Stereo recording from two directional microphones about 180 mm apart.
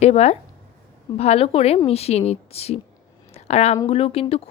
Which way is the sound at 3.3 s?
35° left (ahead or behind).